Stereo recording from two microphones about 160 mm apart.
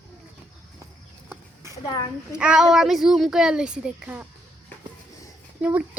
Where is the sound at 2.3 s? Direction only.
5° right (ahead or behind).